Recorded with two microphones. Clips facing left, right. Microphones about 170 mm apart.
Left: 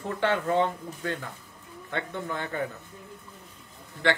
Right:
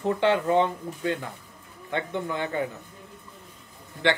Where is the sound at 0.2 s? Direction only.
20° right (ahead or behind).